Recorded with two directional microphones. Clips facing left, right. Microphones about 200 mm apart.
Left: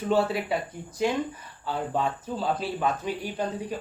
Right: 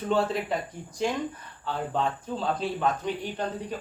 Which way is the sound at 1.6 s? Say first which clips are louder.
Left 1 dB; 10° left (ahead or behind).